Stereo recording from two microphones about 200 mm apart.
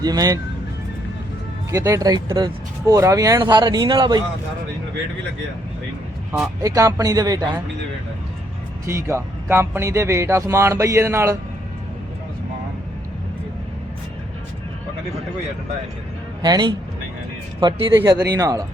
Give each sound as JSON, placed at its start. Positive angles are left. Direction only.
{"t": 0.0, "sound": "speech", "side_deg": -20}
{"t": 1.7, "sound": "speech", "side_deg": -15}
{"t": 6.6, "sound": "speech", "side_deg": -15}
{"t": 8.9, "sound": "speech", "side_deg": -15}
{"t": 16.4, "sound": "speech", "side_deg": -20}